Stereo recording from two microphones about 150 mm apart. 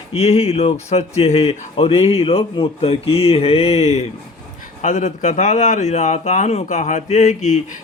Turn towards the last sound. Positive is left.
turn(degrees=50)  # may be behind; listen again after turning